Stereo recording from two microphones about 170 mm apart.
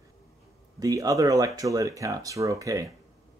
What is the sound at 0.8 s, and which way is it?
Speech, 20° right (ahead or behind).